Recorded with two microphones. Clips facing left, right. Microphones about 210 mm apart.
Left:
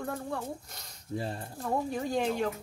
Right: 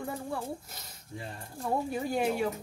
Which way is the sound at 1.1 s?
35° left (ahead or behind).